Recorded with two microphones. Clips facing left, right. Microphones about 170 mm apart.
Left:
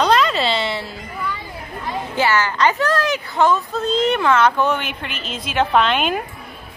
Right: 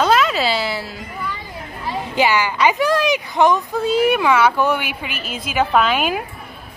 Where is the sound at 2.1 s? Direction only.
15° right (ahead or behind).